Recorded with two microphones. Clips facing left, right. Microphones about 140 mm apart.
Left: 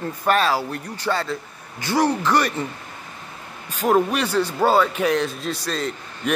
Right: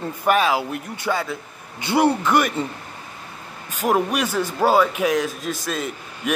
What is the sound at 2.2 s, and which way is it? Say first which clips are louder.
Speech: right 1 dB; 20° right (ahead or behind).